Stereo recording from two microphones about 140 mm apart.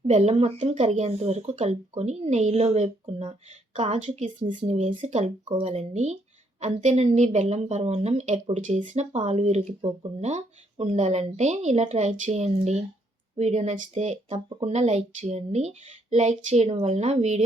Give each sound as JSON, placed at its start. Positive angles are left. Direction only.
{"t": 0.1, "sound": "speech", "side_deg": -50}
{"t": 14.3, "sound": "speech", "side_deg": -40}
{"t": 14.7, "sound": "speech", "side_deg": -50}